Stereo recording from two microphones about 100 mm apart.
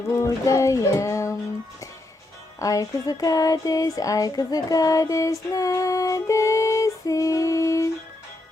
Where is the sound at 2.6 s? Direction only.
35° left (ahead or behind).